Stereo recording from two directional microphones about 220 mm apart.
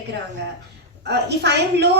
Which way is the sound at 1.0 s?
50° right (ahead or behind).